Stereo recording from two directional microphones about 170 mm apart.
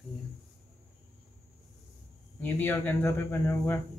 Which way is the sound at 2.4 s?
10° left (ahead or behind).